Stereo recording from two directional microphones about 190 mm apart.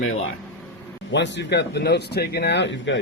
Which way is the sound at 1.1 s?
65° left (ahead or behind).